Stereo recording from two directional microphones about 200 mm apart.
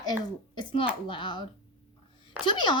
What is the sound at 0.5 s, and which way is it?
A child's voice, 25° left (ahead or behind).